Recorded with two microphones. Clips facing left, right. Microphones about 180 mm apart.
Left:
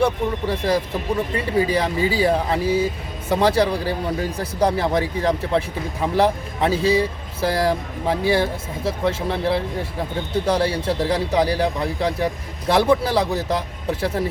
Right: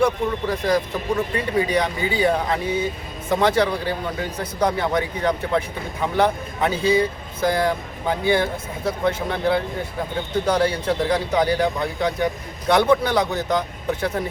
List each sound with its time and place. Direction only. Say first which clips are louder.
0.0 s a man's voice: even; 30° left (ahead or behind)